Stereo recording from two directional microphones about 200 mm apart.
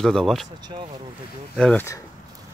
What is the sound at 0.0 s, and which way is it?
Speech, centre (ahead or behind).